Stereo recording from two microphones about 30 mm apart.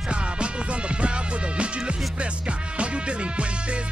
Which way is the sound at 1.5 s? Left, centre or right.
Right.